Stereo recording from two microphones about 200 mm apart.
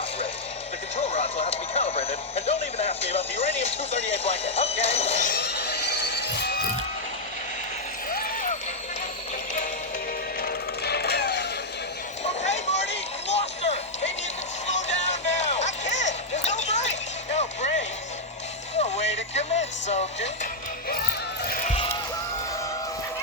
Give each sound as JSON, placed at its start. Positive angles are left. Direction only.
{"t": 0.9, "sound": "music", "side_deg": 30}
{"t": 5.3, "sound": "music", "side_deg": 55}
{"t": 8.1, "sound": "vehicle", "side_deg": 45}
{"t": 10.4, "sound": "a sound", "side_deg": 55}
{"t": 12.2, "sound": "a sound", "side_deg": 35}
{"t": 14.7, "sound": "music", "side_deg": 35}